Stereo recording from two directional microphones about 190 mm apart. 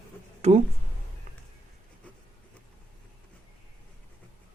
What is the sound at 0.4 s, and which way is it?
Speech, 35° right (ahead or behind).